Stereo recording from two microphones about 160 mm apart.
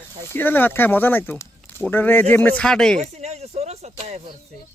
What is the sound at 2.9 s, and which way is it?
Speech, 45° right (ahead or behind).